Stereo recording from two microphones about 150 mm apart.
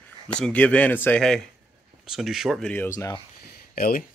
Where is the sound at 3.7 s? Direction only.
80° left.